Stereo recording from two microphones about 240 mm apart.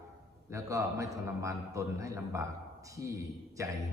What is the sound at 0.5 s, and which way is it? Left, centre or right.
A man's voice, centre.